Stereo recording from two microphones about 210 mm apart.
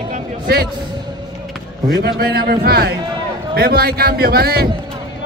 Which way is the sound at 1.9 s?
50° right (ahead or behind).